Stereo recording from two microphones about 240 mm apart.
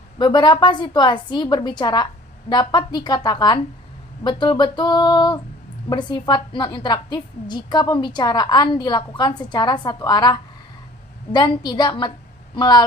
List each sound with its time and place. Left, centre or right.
0.2 s a woman's voice: centre